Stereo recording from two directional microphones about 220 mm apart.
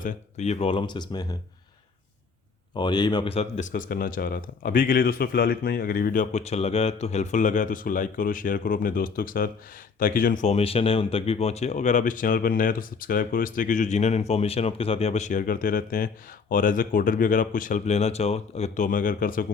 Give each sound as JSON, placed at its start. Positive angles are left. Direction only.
{"t": 0.0, "sound": "speech", "side_deg": 30}
{"t": 2.7, "sound": "speech", "side_deg": 20}